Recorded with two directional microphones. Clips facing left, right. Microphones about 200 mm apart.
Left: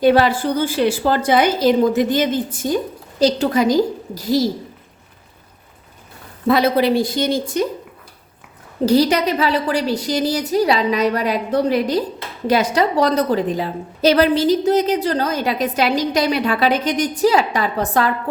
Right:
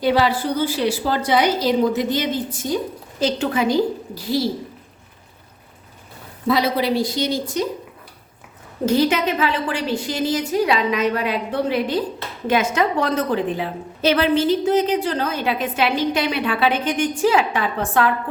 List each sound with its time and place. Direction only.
0.0 s a woman's voice: 50° left (ahead or behind)
3.2 s a woman's voice: 35° left (ahead or behind)
6.5 s a woman's voice: 55° left (ahead or behind)
8.9 s a woman's voice: 35° left (ahead or behind)